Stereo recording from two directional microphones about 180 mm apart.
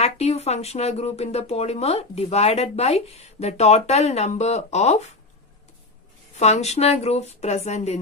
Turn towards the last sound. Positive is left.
turn(degrees=35)  # may be behind; listen again after turning